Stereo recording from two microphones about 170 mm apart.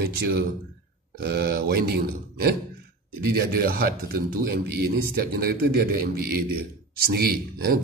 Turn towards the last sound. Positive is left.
turn(degrees=-65)  # may be behind; listen again after turning